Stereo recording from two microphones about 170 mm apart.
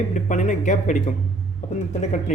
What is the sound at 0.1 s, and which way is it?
Speech, 45° left (ahead or behind).